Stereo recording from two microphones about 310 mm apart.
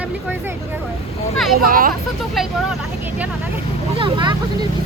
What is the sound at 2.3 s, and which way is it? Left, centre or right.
Speech, centre.